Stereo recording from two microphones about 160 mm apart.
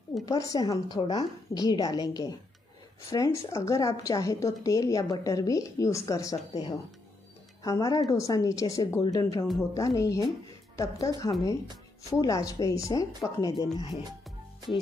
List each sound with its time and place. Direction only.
0.2 s a woman's voice: 20° left (ahead or behind)